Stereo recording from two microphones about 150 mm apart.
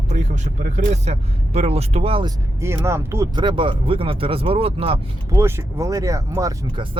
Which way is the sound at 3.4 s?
35° right (ahead or behind).